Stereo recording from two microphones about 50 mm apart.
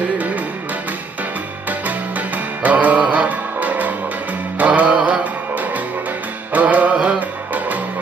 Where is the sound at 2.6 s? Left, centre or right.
Right.